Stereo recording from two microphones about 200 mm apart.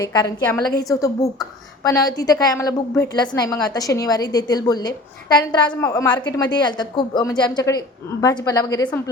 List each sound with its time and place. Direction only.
0.0 s a woman's voice: 20° left (ahead or behind)